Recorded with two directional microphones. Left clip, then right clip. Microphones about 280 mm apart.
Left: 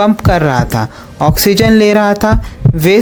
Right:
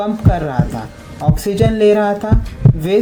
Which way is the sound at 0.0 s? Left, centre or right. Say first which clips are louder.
Left 8 dB; left.